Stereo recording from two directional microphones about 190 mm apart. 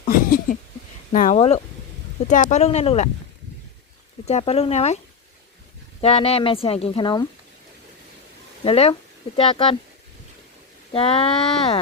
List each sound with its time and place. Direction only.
0.0 s a sound: 45° left (ahead or behind)
1.1 s speech: 45° left (ahead or behind)
1.4 s speech: 30° left (ahead or behind)
2.2 s speech: 40° left (ahead or behind)
4.3 s speech: 35° left (ahead or behind)
6.0 s speech: 30° left (ahead or behind)
8.6 s speech: 30° left (ahead or behind)
10.9 s speech: 30° left (ahead or behind)